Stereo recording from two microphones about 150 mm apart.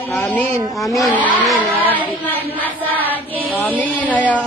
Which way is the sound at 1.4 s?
Centre (ahead or behind).